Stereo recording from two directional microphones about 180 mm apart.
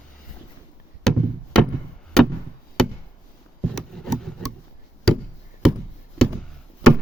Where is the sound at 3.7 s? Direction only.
5° left (ahead or behind).